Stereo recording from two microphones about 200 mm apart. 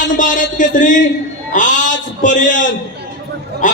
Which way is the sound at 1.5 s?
40° left (ahead or behind).